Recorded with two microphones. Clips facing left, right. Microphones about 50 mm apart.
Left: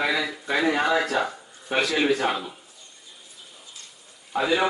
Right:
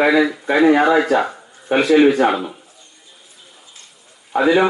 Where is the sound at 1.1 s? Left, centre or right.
Right.